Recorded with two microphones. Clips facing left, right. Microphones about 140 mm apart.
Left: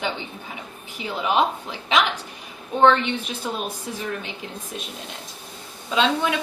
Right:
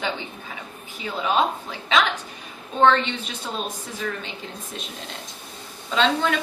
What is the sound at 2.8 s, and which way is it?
Speech, 15° left (ahead or behind).